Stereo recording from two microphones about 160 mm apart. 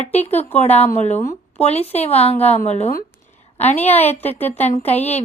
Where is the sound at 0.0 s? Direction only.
40° left (ahead or behind).